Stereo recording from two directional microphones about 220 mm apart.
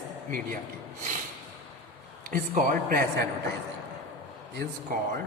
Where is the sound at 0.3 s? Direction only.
35° right (ahead or behind).